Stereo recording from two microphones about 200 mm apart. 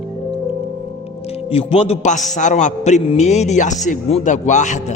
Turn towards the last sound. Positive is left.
turn(degrees=35)  # may be behind; listen again after turning